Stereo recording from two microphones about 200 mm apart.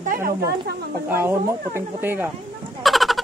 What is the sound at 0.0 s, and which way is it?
Speech, 45° right (ahead or behind).